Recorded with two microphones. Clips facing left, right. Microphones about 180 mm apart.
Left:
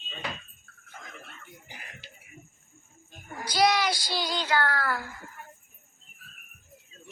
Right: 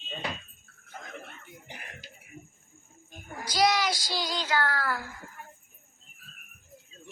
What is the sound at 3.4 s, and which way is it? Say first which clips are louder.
A child's voice: left 1 dB; 60° left (ahead or behind).